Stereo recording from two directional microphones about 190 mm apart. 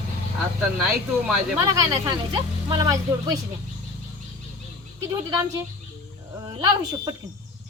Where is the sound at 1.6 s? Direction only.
15° right (ahead or behind).